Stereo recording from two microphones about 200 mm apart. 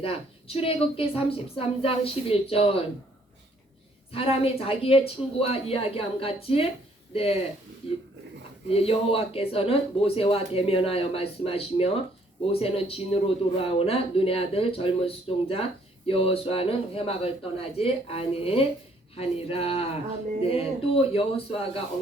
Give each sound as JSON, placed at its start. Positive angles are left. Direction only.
{"t": 0.0, "sound": "speech", "side_deg": 30}
{"t": 4.1, "sound": "speech", "side_deg": 30}
{"t": 8.7, "sound": "speech", "side_deg": 30}